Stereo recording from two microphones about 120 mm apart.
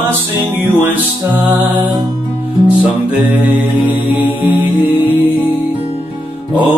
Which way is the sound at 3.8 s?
15° right (ahead or behind).